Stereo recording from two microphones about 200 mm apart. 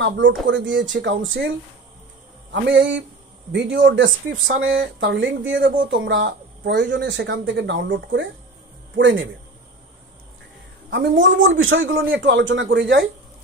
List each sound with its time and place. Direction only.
0.0 s speech: 65° right (ahead or behind)
2.5 s speech: 65° right (ahead or behind)
10.9 s speech: 65° right (ahead or behind)